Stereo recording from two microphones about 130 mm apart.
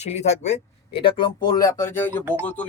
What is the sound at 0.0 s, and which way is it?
Speech, 60° left (ahead or behind).